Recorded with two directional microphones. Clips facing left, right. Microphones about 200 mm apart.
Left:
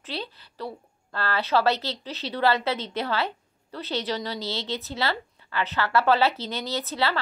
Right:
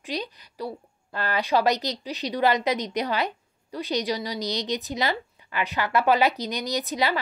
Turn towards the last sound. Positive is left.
turn(degrees=-15)  # may be behind; listen again after turning